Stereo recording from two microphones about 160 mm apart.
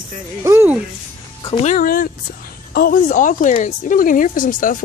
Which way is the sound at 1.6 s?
60° left (ahead or behind).